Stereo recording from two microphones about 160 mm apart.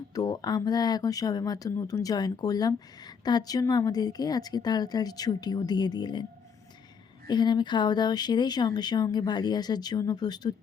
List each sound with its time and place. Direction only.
0.1 s speech: 25° left (ahead or behind)
7.3 s speech: 25° left (ahead or behind)